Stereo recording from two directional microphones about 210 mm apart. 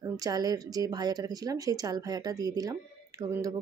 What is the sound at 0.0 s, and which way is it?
Speech, 15° right (ahead or behind).